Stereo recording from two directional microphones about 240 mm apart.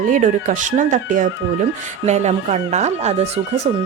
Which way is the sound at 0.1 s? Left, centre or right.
Right.